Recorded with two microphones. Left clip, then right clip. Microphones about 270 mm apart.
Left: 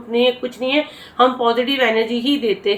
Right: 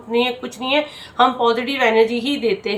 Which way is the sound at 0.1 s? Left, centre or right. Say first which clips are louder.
Left 3 dB; centre.